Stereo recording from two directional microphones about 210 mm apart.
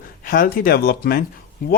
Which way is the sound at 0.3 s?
45° left (ahead or behind).